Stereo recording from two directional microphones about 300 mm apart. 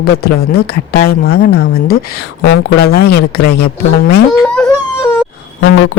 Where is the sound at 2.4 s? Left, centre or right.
Left.